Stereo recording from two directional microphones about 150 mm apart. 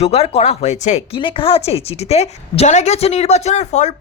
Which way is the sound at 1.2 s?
35° left (ahead or behind).